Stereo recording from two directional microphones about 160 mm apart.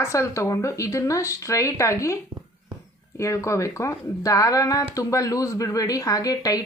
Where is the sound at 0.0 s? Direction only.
20° left (ahead or behind).